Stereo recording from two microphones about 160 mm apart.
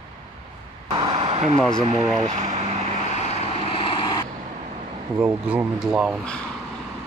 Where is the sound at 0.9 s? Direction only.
30° right (ahead or behind).